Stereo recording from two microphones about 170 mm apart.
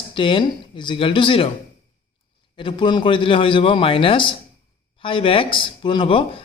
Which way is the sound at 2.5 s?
30° left (ahead or behind).